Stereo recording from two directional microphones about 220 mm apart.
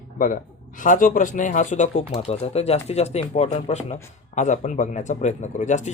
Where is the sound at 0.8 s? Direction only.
35° left (ahead or behind).